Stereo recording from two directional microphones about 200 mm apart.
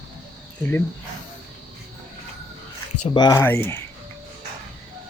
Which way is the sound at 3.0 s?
20° left (ahead or behind).